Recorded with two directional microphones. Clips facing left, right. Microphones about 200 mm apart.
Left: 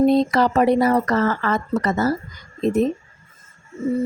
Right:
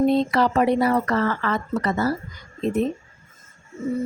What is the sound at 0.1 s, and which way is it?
Speech, 40° left (ahead or behind).